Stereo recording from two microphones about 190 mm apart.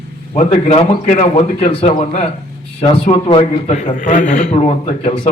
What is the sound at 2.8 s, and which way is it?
Speech, 30° left (ahead or behind).